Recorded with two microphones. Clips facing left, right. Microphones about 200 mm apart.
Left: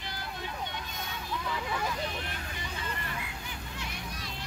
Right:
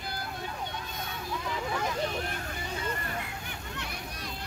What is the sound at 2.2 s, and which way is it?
Vehicle, 45° right (ahead or behind).